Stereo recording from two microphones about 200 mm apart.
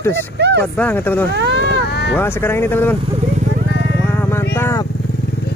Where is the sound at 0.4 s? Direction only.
55° right (ahead or behind).